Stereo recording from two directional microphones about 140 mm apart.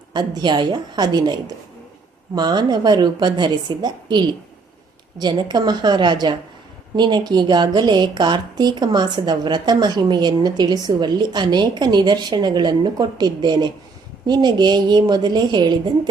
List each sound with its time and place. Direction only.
0.1 s a woman's voice: 30° right (ahead or behind)